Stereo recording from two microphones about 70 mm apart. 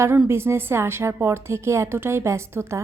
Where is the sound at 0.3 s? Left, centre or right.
Right.